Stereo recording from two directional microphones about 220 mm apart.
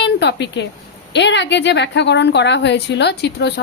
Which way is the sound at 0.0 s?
50° left (ahead or behind).